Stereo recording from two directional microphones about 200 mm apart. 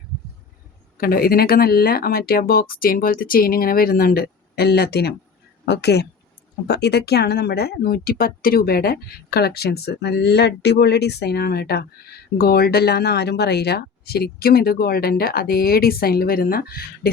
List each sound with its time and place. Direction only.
0.9 s speech: 45° left (ahead or behind)